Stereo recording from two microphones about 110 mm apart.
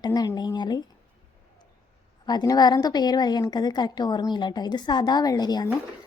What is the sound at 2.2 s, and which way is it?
A woman's voice, 35° left (ahead or behind).